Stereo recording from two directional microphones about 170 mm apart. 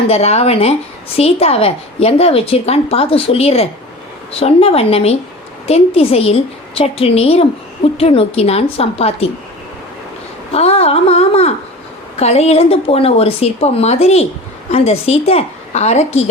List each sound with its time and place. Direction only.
0.1 s a woman's voice: 35° left (ahead or behind)
10.5 s a woman's voice: 35° left (ahead or behind)